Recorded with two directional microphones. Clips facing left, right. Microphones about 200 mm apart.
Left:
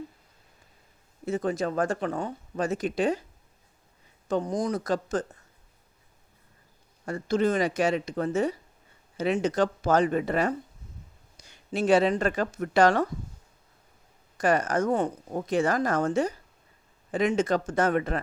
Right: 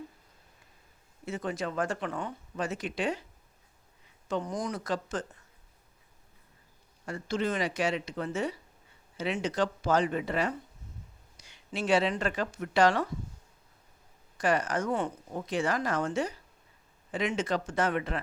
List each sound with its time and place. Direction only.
1.2 s speech: 40° left (ahead or behind)
4.3 s speech: 35° left (ahead or behind)
7.0 s speech: 45° left (ahead or behind)
14.3 s speech: 45° left (ahead or behind)